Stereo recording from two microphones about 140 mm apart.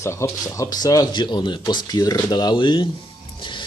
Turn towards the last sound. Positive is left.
turn(degrees=35)  # may be behind; listen again after turning